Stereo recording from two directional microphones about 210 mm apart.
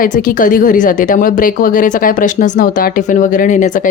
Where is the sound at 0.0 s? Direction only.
40° left (ahead or behind).